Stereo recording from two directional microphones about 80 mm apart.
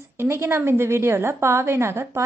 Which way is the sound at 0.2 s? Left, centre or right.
Right.